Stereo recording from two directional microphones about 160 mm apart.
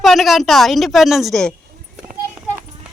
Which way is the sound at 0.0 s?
Centre (ahead or behind).